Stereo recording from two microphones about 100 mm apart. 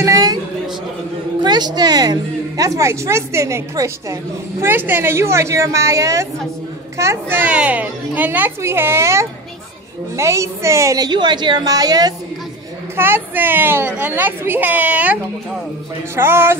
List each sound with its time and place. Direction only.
0.0 s a sound: 35° right (ahead or behind)
1.4 s a woman's voice: 45° right (ahead or behind)
11.1 s a woman's voice: 50° right (ahead or behind)
12.9 s a woman's voice: 20° right (ahead or behind)
16.2 s a woman's voice: 25° right (ahead or behind)